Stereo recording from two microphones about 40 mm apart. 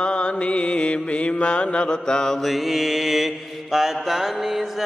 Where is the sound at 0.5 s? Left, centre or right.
Left.